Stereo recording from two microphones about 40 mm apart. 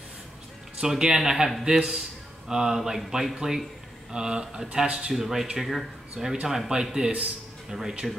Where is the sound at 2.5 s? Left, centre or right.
Centre.